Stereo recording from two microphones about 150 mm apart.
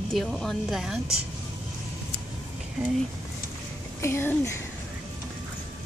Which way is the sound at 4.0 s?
15° left (ahead or behind).